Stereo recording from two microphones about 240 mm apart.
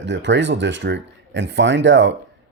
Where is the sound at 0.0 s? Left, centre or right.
Right.